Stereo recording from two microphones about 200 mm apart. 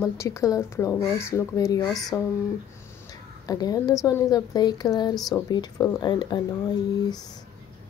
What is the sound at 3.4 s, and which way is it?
A woman's voice, 20° left (ahead or behind).